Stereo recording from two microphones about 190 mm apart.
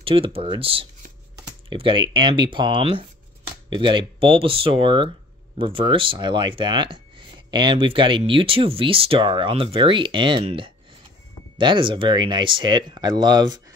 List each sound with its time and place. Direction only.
0.0 s speech: 30° right (ahead or behind)